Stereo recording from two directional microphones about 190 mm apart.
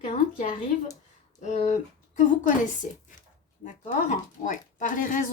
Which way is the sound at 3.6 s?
45° left (ahead or behind).